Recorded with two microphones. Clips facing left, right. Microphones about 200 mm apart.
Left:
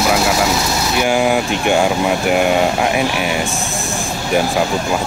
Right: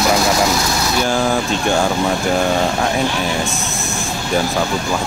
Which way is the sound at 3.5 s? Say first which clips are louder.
Left 2 dB; 30° left (ahead or behind).